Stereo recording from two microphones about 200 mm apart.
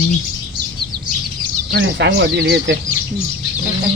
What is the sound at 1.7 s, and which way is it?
Speech, 55° right (ahead or behind).